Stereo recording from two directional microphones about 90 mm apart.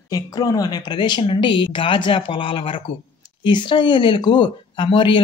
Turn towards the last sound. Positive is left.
turn(degrees=65)  # may be behind; listen again after turning